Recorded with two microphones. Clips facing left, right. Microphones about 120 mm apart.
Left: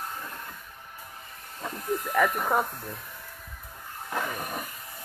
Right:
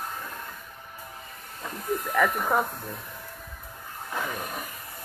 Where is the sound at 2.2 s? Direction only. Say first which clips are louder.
Right 1 dB; 5° left (ahead or behind).